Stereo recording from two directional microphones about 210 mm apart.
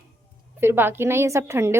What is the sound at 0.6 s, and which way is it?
A woman's voice, 10° right (ahead or behind).